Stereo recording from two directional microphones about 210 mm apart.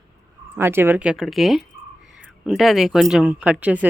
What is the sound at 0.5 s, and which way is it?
Speech, 10° right (ahead or behind).